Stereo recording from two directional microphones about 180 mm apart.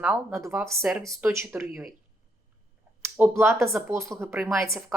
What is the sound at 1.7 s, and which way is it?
Speech, centre (ahead or behind).